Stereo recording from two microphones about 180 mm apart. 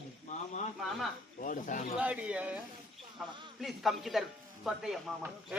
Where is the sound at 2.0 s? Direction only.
5° right (ahead or behind).